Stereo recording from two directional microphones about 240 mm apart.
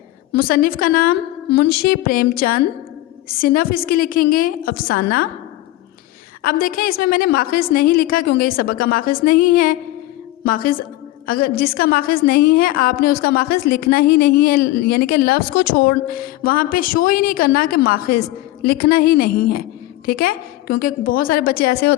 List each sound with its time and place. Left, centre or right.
0.3 s a woman's voice: left
6.4 s a woman's voice: left